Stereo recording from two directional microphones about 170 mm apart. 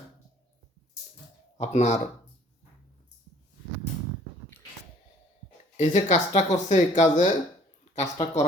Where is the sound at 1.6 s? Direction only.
45° left (ahead or behind).